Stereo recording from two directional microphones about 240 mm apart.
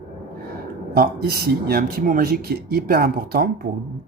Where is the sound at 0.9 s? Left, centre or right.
Right.